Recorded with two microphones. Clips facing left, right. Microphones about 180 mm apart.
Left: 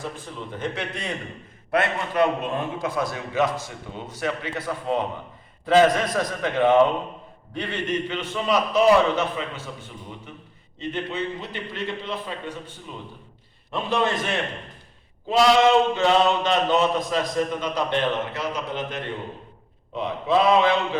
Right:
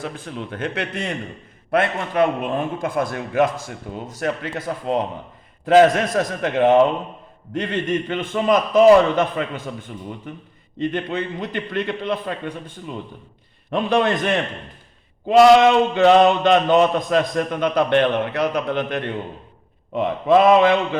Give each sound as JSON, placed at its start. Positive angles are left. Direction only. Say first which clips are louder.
{"t": 0.0, "sound": "a man's voice", "louder": "right 4 dB", "side_deg": -80}
{"t": 1.7, "sound": "a man's voice", "louder": "right 3 dB", "side_deg": -55}
{"t": 6.1, "sound": "a man's voice", "louder": "right 4 dB", "side_deg": -45}
{"t": 13.7, "sound": "a man's voice", "louder": "right 5 dB", "side_deg": -60}